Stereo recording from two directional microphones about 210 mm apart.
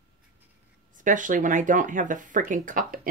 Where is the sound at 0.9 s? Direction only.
40° right (ahead or behind).